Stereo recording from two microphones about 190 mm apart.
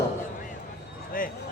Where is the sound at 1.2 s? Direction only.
50° left (ahead or behind).